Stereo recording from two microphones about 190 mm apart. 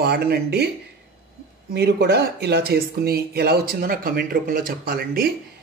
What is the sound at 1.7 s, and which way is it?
A man's voice, 60° right (ahead or behind).